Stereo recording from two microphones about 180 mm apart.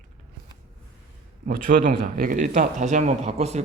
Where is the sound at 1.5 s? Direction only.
45° right (ahead or behind).